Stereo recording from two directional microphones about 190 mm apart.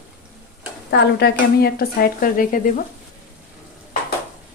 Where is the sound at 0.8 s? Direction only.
60° left (ahead or behind); by 2.6 s 45° left (ahead or behind).